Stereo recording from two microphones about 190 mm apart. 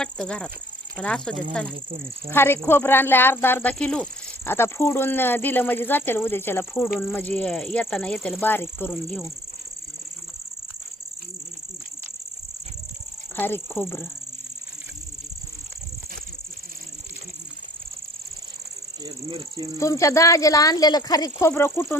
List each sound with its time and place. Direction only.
0.0 s speech: 5° left (ahead or behind)
13.3 s speech: 10° left (ahead or behind)
19.0 s cricket: 25° right (ahead or behind)
19.8 s speech: 15° left (ahead or behind)